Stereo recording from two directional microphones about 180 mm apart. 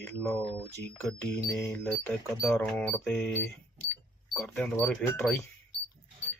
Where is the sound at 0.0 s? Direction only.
5° left (ahead or behind).